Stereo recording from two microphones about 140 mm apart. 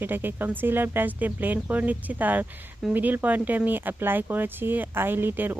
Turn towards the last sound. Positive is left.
turn(degrees=-15)  # may be behind; listen again after turning